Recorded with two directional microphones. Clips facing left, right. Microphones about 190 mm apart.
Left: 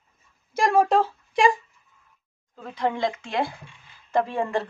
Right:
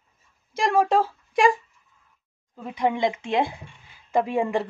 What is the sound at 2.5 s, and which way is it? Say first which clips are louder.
A woman's voice: right 2 dB; 15° right (ahead or behind).